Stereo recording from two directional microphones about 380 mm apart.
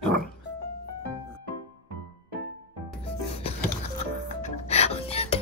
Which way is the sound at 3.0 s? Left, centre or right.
Centre.